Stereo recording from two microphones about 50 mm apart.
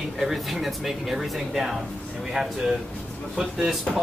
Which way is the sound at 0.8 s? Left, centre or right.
Centre.